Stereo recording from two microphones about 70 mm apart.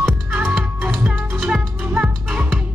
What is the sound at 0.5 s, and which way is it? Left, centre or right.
Music, centre.